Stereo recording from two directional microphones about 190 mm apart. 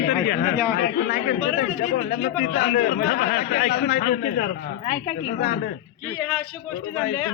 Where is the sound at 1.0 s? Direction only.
55° left (ahead or behind).